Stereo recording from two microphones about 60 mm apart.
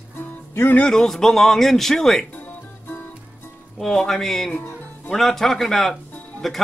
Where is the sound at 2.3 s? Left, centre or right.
Left.